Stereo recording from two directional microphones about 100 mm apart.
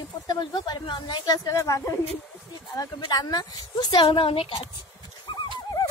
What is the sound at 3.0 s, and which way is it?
A woman's voice, 40° left (ahead or behind).